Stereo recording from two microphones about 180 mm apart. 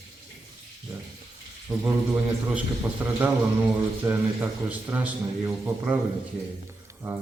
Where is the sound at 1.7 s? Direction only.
25° right (ahead or behind).